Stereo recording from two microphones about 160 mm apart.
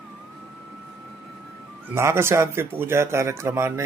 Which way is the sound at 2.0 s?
15° right (ahead or behind).